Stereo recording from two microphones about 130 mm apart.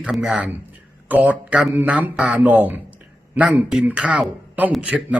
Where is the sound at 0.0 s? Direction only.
5° right (ahead or behind).